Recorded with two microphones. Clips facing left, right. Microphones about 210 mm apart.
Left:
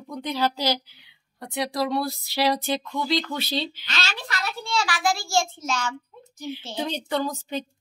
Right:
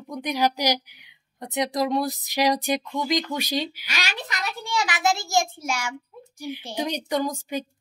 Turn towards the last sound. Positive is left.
turn(degrees=-10)  # may be behind; listen again after turning